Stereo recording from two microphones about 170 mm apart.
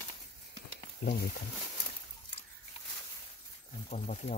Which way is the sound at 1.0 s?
65° left (ahead or behind).